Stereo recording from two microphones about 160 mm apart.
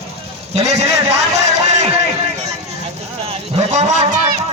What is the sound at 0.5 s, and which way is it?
Speech, 40° right (ahead or behind).